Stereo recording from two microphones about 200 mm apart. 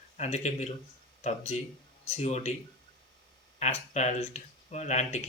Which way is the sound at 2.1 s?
35° left (ahead or behind).